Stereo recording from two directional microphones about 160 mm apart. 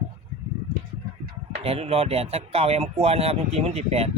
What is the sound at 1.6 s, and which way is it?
Speech, 35° right (ahead or behind).